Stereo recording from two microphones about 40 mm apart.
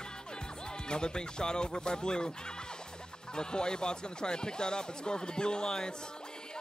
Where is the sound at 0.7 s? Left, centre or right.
Left.